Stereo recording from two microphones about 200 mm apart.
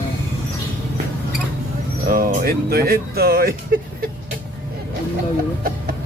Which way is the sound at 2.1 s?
45° right (ahead or behind).